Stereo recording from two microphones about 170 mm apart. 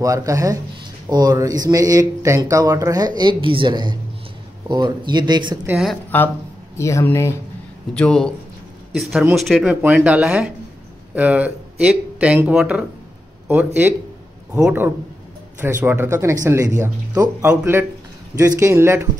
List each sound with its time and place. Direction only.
0.0 s speech: 20° right (ahead or behind)
5.7 s speech: 5° right (ahead or behind)
6.0 s speech: 10° left (ahead or behind)
7.9 s speech: 5° left (ahead or behind)
14.5 s speech: 15° right (ahead or behind)